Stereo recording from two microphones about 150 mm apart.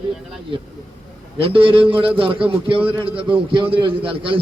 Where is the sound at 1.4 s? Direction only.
35° right (ahead or behind).